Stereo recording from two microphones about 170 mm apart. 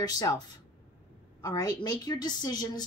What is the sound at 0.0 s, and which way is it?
Speech, 25° left (ahead or behind).